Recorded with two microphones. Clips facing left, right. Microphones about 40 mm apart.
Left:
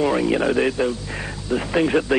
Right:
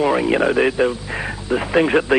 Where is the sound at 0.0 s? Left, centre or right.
Centre.